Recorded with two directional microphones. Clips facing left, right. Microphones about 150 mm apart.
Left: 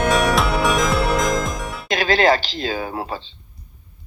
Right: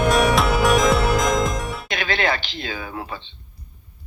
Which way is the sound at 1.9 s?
40° left (ahead or behind).